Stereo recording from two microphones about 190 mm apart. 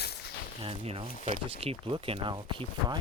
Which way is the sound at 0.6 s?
30° right (ahead or behind).